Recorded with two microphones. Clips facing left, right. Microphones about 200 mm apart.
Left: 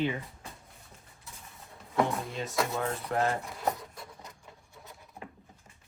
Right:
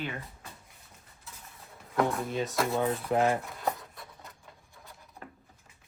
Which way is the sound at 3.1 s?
15° right (ahead or behind).